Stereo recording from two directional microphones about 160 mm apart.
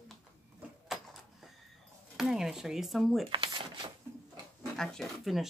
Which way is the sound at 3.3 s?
30° right (ahead or behind).